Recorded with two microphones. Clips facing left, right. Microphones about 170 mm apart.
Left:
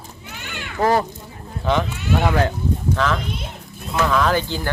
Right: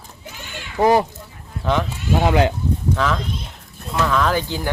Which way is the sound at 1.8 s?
25° right (ahead or behind).